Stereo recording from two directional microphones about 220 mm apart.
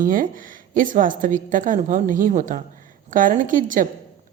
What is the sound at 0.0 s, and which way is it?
Speech, 40° right (ahead or behind).